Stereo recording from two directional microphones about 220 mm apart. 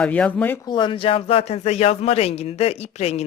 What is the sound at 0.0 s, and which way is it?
Speech, 5° left (ahead or behind).